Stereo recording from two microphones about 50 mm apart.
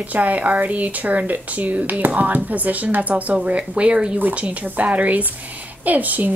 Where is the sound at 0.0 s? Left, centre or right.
Right.